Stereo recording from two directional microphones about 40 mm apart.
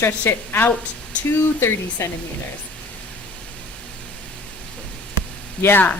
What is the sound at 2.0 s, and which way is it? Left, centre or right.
Speech, left.